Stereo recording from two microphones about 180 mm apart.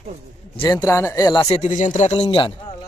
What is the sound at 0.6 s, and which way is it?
Speech, 20° left (ahead or behind).